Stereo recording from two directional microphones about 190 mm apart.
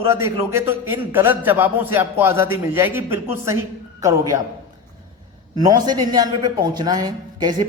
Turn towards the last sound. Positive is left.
turn(degrees=-20)  # may be behind; listen again after turning